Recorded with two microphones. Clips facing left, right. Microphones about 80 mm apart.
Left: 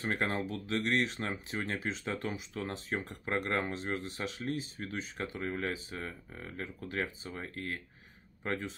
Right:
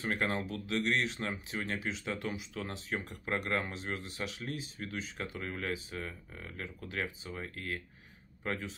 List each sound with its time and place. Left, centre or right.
0.0 s speech: left